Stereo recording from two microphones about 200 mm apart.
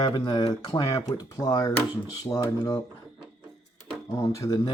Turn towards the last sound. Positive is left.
turn(degrees=20)  # may be behind; listen again after turning